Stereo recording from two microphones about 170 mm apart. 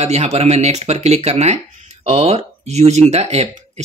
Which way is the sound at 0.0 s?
40° right (ahead or behind).